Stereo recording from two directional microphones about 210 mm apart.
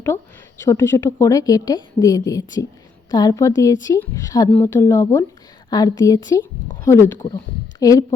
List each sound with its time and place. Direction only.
0.6 s a woman's voice: 15° left (ahead or behind)